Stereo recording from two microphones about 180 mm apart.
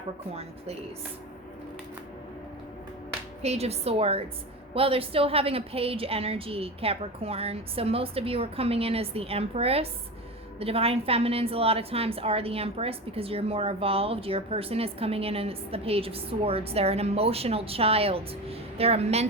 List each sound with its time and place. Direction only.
3.4 s a woman's voice: 35° right (ahead or behind)